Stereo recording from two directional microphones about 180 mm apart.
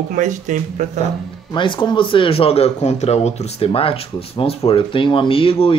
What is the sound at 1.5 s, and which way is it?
Speech, 25° left (ahead or behind).